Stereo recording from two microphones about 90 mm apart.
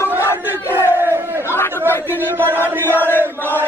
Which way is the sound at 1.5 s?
25° left (ahead or behind).